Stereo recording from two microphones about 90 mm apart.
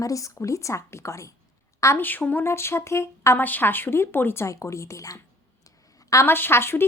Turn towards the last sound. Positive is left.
turn(degrees=25)  # may be behind; listen again after turning